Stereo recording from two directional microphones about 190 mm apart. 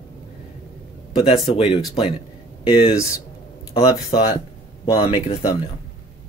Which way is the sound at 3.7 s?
30° left (ahead or behind).